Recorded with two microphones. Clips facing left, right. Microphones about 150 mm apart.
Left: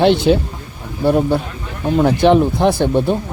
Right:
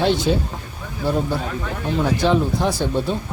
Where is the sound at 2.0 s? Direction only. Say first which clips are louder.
Left 7 dB; 60° left (ahead or behind).